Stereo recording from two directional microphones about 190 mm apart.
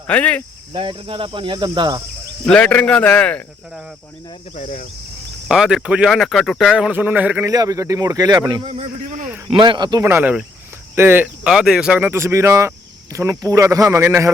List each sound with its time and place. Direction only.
0.1 s a man's voice: 5° left (ahead or behind)
0.7 s speech: 25° right (ahead or behind)
2.5 s a man's voice: 5° left (ahead or behind)
4.5 s cricket: 40° left (ahead or behind)
5.5 s a man's voice: 5° right (ahead or behind); by 9.3 s 40° right (ahead or behind)
9.5 s a man's voice: 25° right (ahead or behind)